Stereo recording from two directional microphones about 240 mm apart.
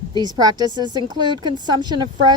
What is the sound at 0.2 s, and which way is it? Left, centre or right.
Speech, centre.